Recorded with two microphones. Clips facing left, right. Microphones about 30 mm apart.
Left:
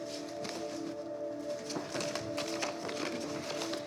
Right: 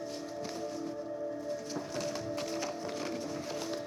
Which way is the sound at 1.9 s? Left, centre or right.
Centre.